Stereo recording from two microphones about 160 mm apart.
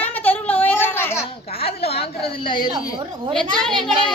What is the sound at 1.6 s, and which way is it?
Speech, 40° left (ahead or behind).